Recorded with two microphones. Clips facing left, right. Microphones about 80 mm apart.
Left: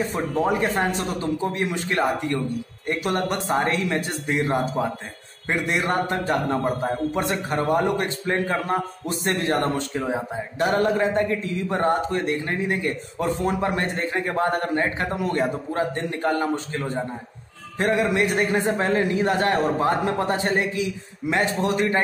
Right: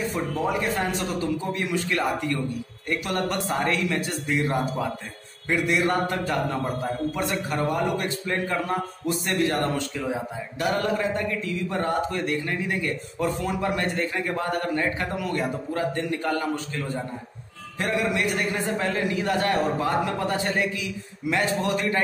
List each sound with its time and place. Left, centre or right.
0.1 s a man's voice: left